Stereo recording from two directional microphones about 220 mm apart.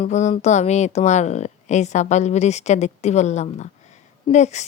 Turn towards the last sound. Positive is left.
turn(degrees=30)  # may be behind; listen again after turning